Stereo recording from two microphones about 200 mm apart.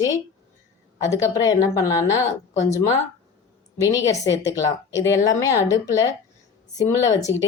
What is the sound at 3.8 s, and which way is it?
Speech, 15° left (ahead or behind).